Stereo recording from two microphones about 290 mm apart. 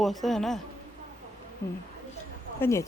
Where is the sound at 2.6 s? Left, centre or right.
Centre.